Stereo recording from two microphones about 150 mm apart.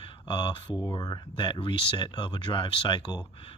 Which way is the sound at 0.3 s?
30° left (ahead or behind).